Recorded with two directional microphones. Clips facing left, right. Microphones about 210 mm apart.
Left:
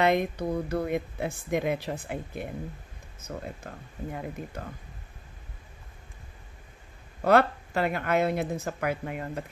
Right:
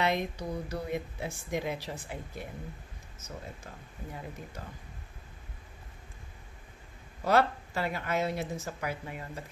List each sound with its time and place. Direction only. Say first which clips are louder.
0.0 s speech: left 6 dB; 55° left (ahead or behind)
7.2 s speech: left 4 dB; 55° left (ahead or behind)